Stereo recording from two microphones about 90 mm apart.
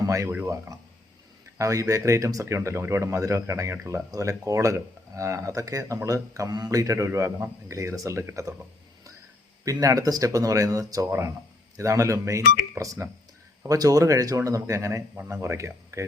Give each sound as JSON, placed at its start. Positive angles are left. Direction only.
{"t": 0.0, "sound": "a sound", "side_deg": -35}
{"t": 0.4, "sound": "speech", "side_deg": -40}
{"t": 9.8, "sound": "speech", "side_deg": -40}